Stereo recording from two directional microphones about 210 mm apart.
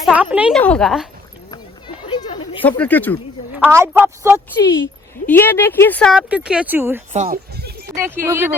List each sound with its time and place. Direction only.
0.0 s a sound: 5° right (ahead or behind)
0.5 s speech: 5° left (ahead or behind)
2.0 s a sound: 20° left (ahead or behind)
2.6 s speech: 5° left (ahead or behind)
3.5 s speech: 10° right (ahead or behind)
5.2 s speech: 10° left (ahead or behind); by 7.0 s 10° right (ahead or behind)
7.1 s speech: 35° right (ahead or behind)
7.9 s speech: 10° right (ahead or behind)